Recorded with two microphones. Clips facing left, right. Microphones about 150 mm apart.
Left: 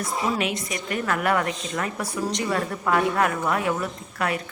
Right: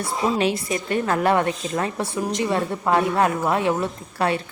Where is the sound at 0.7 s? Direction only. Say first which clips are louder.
Right 4 dB; 30° right (ahead or behind).